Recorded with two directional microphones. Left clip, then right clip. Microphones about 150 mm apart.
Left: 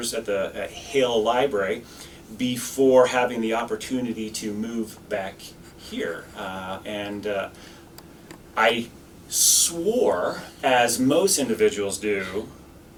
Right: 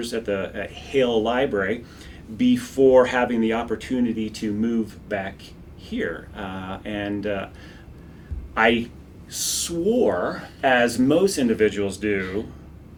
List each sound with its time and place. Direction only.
0.0 s speech: 30° left (ahead or behind)
8.6 s speech: 30° left (ahead or behind)